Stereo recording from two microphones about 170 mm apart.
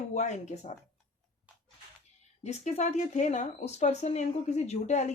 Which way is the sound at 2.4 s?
40° left (ahead or behind).